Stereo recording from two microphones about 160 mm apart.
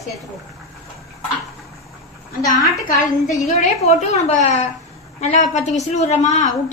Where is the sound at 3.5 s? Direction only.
45° left (ahead or behind).